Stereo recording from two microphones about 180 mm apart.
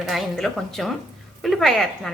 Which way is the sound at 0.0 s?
Centre (ahead or behind).